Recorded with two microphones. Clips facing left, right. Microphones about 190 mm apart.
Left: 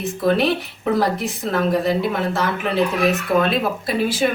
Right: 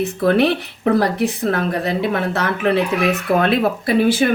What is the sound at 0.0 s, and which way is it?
Speech, 60° right (ahead or behind).